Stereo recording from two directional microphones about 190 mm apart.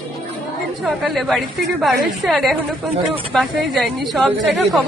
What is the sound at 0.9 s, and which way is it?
A woman's voice, centre (ahead or behind).